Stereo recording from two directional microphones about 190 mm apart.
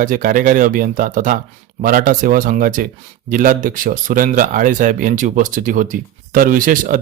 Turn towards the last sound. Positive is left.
turn(degrees=-45)  # may be behind; listen again after turning